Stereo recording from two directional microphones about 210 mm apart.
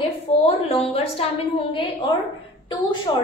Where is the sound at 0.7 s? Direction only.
30° left (ahead or behind).